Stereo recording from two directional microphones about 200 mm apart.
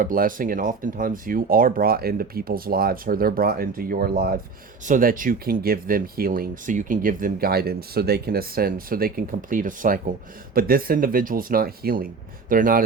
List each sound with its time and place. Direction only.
0.0 s speech: 45° right (ahead or behind)